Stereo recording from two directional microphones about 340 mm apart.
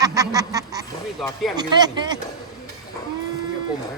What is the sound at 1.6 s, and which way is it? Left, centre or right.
Speech, centre.